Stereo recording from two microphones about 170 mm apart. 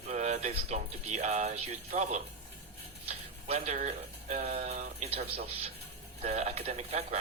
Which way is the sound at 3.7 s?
45° right (ahead or behind).